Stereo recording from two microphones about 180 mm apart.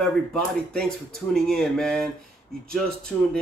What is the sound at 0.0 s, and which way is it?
Speech, 5° left (ahead or behind).